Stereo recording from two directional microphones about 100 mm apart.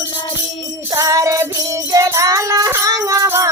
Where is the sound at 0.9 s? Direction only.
35° right (ahead or behind).